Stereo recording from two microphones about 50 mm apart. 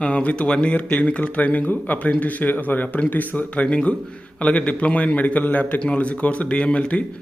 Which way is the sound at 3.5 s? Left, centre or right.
Left.